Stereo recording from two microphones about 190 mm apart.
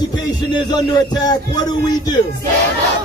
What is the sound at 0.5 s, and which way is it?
Speech, 20° left (ahead or behind).